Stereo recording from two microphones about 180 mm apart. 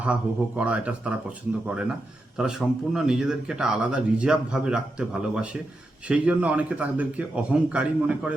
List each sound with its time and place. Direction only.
0.0 s a man's voice: 5° right (ahead or behind)
2.4 s a man's voice: 5° right (ahead or behind)